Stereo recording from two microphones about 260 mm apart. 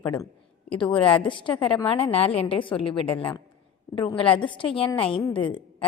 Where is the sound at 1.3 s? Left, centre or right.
Centre.